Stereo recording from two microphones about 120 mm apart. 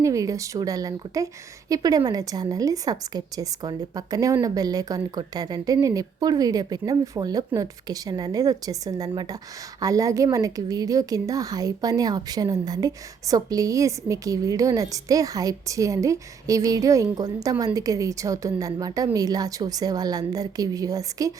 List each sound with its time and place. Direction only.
0.0 s a woman's voice: 25° right (ahead or behind)